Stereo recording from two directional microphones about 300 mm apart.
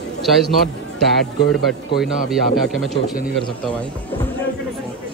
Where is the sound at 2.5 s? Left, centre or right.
Centre.